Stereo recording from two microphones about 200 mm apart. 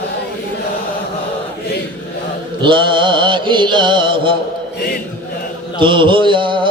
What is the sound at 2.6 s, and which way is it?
Mantra, 25° right (ahead or behind).